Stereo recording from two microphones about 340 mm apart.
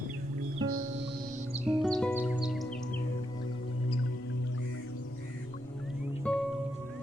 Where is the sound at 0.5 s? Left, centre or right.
Right.